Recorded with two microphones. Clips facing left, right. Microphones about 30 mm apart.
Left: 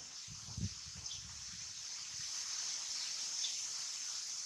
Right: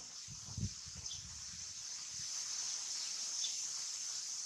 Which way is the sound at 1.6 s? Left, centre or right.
Centre.